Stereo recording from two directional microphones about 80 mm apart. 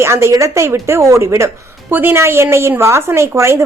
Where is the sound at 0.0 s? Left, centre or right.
Right.